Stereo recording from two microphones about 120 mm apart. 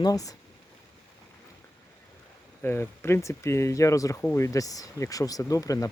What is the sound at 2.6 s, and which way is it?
Speech, 20° left (ahead or behind).